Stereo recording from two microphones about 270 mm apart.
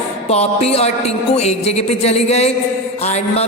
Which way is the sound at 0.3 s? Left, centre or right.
Left.